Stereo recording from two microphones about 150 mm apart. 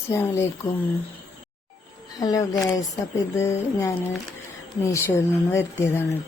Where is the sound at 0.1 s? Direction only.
15° left (ahead or behind).